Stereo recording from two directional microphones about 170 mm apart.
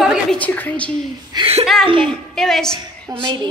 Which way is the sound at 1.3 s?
30° right (ahead or behind).